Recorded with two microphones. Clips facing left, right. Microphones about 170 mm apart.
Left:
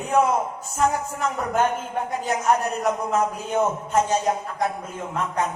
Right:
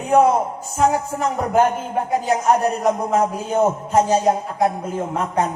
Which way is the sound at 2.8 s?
35° right (ahead or behind).